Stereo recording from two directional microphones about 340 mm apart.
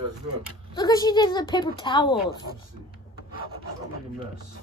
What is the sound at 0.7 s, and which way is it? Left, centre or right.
Speech, centre.